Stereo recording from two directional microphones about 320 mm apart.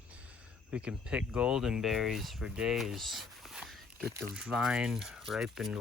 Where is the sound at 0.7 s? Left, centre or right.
Centre.